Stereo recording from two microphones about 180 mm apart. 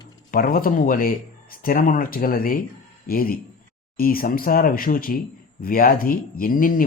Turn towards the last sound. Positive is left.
turn(degrees=50)  # may be behind; listen again after turning